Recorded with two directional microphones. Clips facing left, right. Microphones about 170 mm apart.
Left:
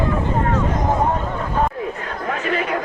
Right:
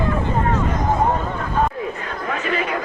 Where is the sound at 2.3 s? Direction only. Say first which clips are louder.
Left 1 dB; 45° left (ahead or behind).